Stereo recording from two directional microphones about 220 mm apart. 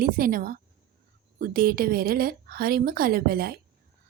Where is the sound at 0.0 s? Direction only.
40° right (ahead or behind).